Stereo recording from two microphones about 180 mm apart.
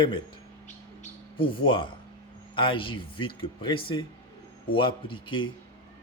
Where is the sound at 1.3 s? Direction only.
30° left (ahead or behind).